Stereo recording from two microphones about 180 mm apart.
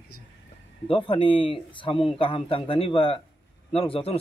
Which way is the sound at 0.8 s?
30° left (ahead or behind).